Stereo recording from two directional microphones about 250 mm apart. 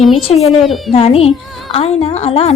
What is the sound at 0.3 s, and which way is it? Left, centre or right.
Speech, left.